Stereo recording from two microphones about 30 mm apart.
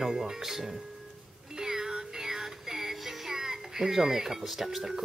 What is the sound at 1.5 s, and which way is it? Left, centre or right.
Music, centre.